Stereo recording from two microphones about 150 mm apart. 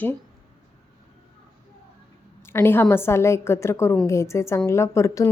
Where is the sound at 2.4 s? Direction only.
15° left (ahead or behind).